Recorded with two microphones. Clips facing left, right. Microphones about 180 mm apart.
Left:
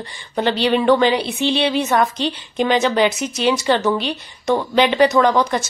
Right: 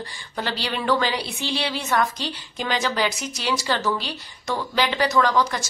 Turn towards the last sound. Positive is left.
turn(degrees=20)  # may be behind; listen again after turning